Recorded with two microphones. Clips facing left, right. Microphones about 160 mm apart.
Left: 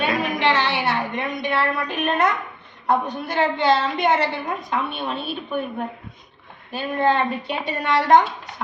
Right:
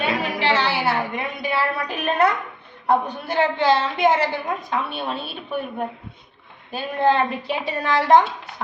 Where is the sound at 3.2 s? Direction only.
5° right (ahead or behind).